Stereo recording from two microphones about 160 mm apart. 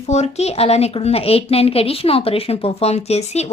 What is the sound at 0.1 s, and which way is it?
A woman's voice, 45° left (ahead or behind).